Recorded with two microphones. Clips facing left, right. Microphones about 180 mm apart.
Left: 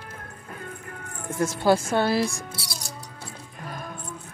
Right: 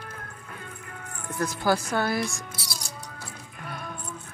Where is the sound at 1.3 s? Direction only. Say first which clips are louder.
Left 4 dB; 25° left (ahead or behind).